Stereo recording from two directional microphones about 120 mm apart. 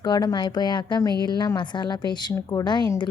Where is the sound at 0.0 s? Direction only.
35° left (ahead or behind).